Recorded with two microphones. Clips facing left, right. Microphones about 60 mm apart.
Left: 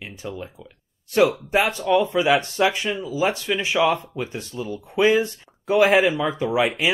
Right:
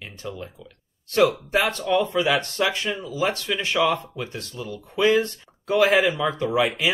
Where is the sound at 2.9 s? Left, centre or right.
Centre.